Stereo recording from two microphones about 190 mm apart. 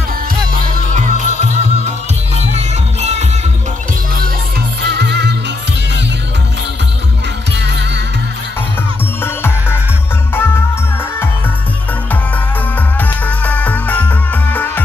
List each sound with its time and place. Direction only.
0.6 s music: 40° right (ahead or behind)
4.8 s music: 60° right (ahead or behind)
9.2 s music: 10° left (ahead or behind)
13.0 s music: 10° left (ahead or behind)